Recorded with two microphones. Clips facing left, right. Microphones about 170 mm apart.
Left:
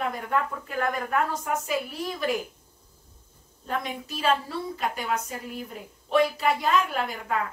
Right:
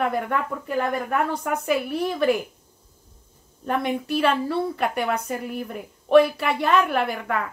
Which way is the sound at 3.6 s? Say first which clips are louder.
Right 7 dB; 60° right (ahead or behind).